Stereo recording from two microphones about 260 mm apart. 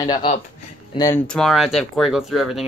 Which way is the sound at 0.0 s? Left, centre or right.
Centre.